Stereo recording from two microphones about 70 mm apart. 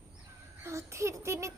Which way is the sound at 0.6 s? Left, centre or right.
Right.